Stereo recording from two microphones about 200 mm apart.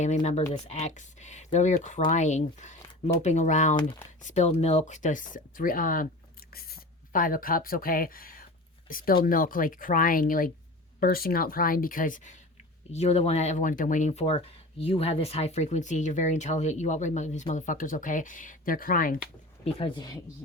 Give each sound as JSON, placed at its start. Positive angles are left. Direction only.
{"t": 0.0, "sound": "speech", "side_deg": 35}
{"t": 19.6, "sound": "speech", "side_deg": 25}